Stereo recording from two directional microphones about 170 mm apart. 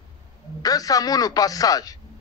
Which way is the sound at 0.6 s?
20° left (ahead or behind).